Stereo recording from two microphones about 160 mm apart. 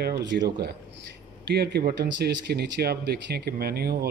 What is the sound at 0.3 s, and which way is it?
Speech, 90° right.